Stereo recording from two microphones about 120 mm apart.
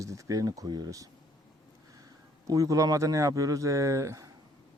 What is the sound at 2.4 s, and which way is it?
Speech, 30° right (ahead or behind).